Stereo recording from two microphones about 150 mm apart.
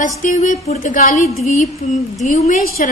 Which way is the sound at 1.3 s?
50° left (ahead or behind).